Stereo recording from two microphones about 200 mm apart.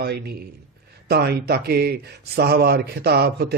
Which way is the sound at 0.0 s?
50° right (ahead or behind).